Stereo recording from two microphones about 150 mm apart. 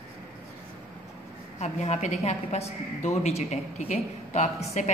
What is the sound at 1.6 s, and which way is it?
A woman's voice, 50° left (ahead or behind).